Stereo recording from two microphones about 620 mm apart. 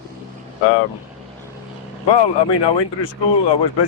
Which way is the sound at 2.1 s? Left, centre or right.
Left.